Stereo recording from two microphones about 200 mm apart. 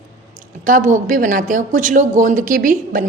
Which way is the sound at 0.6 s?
40° right (ahead or behind).